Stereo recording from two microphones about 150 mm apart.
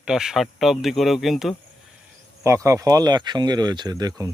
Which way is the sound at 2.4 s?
20° right (ahead or behind).